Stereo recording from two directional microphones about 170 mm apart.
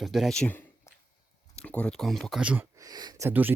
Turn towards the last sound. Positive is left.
turn(degrees=-15)  # may be behind; listen again after turning